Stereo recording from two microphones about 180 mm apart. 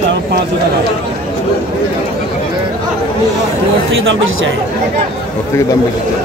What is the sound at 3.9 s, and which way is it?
Speech, 90° right.